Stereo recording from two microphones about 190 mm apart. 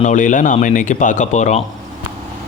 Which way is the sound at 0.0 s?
40° left (ahead or behind).